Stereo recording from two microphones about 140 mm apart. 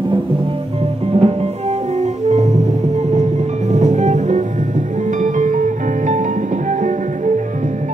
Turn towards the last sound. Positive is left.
turn(degrees=-60)  # may be behind; listen again after turning